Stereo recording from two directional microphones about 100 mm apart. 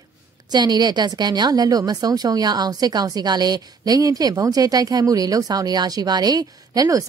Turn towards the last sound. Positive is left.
turn(degrees=-35)  # may be behind; listen again after turning